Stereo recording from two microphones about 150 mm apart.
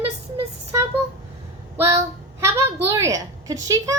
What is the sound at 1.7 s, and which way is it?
A woman's voice, 20° right (ahead or behind).